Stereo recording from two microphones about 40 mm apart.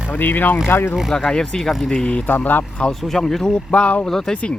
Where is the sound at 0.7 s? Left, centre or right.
Left.